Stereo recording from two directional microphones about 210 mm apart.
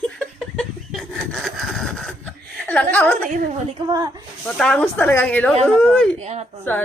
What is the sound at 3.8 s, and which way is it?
Speech, 20° right (ahead or behind).